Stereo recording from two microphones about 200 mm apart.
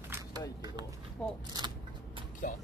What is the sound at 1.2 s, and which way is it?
Speech, 5° left (ahead or behind).